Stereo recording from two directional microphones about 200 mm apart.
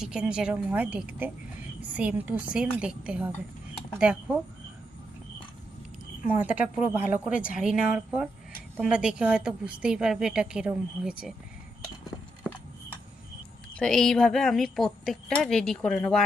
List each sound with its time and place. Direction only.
0.0 s a woman's voice: 5° right (ahead or behind)
6.4 s speech: 5° right (ahead or behind)
13.7 s speech: 5° left (ahead or behind)